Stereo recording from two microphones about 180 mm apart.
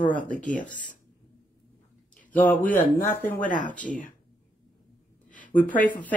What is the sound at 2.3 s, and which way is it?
Speech, 10° left (ahead or behind).